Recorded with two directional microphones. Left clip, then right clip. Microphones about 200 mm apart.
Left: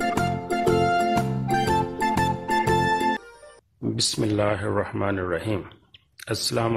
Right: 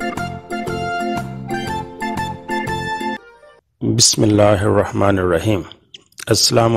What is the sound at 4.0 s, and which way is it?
Speech, 45° right (ahead or behind).